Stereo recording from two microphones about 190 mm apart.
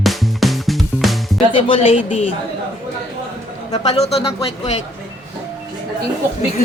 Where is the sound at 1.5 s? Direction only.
30° left (ahead or behind).